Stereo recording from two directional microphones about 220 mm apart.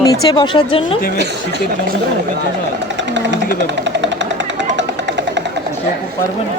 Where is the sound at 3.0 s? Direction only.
55° right (ahead or behind).